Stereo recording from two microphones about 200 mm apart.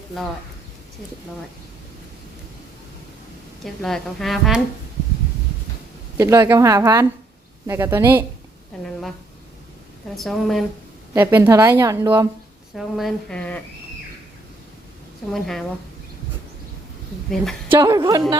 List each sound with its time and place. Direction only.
3.8 s speech: centre (ahead or behind)
6.1 s a woman's voice: 15° right (ahead or behind)
8.8 s speech: centre (ahead or behind)
10.2 s speech: centre (ahead or behind)
11.1 s a woman's voice: 10° right (ahead or behind)
12.7 s speech: centre (ahead or behind)
15.3 s speech: centre (ahead or behind)
17.7 s a woman's voice: 15° right (ahead or behind)